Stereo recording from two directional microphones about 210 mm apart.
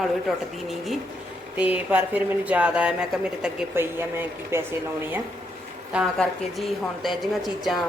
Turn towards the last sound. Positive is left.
turn(degrees=0)  # may be behind; listen again after turning